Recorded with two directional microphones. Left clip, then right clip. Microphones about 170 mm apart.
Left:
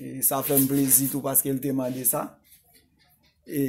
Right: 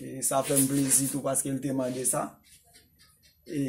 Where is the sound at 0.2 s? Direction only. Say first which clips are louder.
Left 1 dB; 65° left (ahead or behind).